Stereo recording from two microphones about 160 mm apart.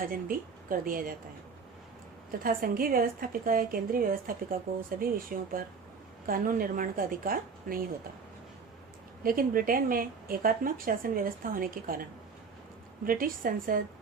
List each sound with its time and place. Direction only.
0.0 s speech: 60° right (ahead or behind)
2.4 s speech: 65° right (ahead or behind)
9.2 s speech: 65° right (ahead or behind)
13.1 s speech: 60° right (ahead or behind)